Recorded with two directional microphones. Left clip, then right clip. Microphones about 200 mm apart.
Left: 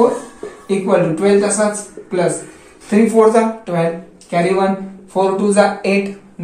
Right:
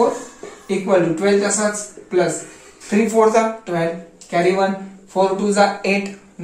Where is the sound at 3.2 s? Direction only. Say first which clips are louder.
Left 2 dB; 10° right (ahead or behind).